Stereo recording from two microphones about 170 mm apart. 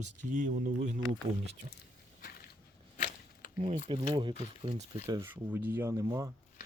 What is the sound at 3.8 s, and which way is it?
Speech, 30° right (ahead or behind).